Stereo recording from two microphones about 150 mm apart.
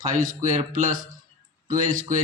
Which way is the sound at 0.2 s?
65° right (ahead or behind).